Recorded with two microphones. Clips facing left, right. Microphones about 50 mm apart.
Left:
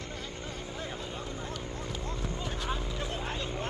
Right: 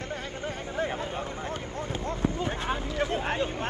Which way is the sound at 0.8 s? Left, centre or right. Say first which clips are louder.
Right 11 dB; right.